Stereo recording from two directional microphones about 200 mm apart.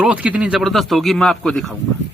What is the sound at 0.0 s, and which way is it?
Speech, 5° right (ahead or behind).